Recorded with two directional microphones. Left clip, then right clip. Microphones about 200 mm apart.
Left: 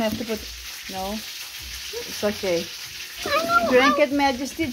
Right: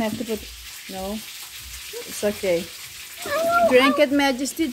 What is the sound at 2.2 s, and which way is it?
Frying, 25° right (ahead or behind).